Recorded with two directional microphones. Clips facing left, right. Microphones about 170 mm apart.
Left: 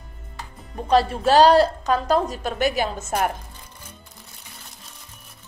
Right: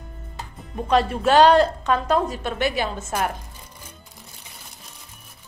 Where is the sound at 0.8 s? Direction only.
35° left (ahead or behind).